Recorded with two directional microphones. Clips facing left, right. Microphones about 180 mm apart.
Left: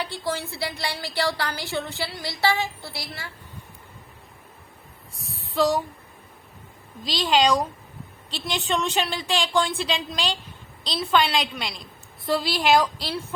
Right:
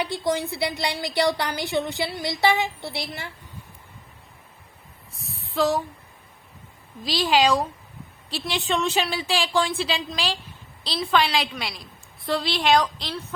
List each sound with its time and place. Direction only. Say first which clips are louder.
0.0 s a woman's voice: right 4 dB; 15° right (ahead or behind)
5.1 s a sound: left 1 dB; centre (ahead or behind)
7.0 s a woman's voice: right 1 dB; 5° right (ahead or behind)